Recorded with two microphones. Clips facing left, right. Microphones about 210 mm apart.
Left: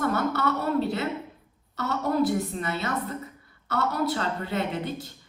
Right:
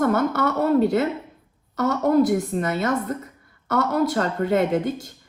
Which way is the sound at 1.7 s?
45° right (ahead or behind).